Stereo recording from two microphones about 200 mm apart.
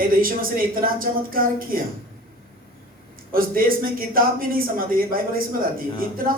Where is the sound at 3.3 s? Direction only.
45° right (ahead or behind).